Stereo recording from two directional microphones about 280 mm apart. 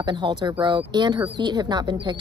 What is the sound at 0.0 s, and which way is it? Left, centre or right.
Speech, centre.